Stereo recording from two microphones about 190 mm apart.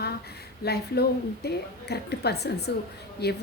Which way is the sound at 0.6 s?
55° left (ahead or behind).